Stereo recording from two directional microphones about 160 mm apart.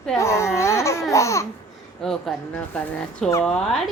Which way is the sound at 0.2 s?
15° left (ahead or behind).